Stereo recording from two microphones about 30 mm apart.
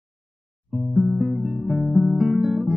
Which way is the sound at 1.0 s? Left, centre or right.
Centre.